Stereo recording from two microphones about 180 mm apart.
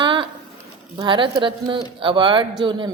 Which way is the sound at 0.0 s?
25° right (ahead or behind).